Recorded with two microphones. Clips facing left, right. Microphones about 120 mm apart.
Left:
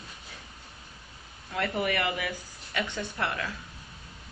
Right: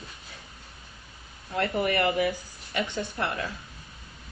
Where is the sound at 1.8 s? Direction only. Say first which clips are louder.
Right 5 dB; 35° right (ahead or behind).